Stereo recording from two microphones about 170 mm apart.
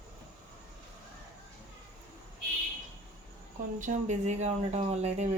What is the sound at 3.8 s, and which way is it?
Speech, 45° right (ahead or behind).